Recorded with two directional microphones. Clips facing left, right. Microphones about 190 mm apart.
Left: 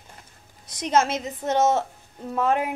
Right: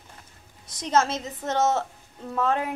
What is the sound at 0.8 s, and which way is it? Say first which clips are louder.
Speech: left 2 dB; 15° left (ahead or behind).